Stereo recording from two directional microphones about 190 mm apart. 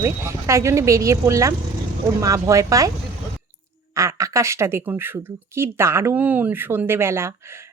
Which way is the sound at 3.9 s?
15° right (ahead or behind).